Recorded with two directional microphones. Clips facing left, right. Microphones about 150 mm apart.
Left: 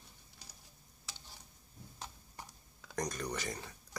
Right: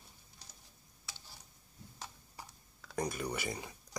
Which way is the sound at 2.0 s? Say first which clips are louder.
Even; centre (ahead or behind).